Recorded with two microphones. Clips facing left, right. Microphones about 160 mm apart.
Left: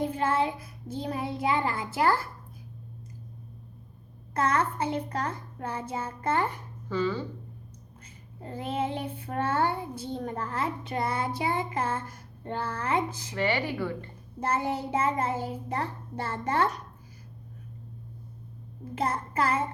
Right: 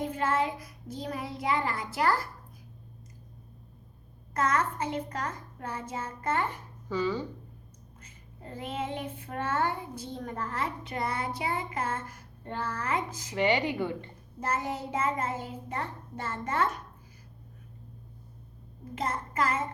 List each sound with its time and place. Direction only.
0.0 s child singing: 30° left (ahead or behind)
4.4 s a child's voice: 30° left (ahead or behind)
6.8 s speech: 15° right (ahead or behind)
8.4 s child singing: 30° left (ahead or behind)
13.3 s speech: 20° right (ahead or behind)
14.4 s a child's voice: 30° left (ahead or behind)
18.9 s a child's voice: 30° left (ahead or behind)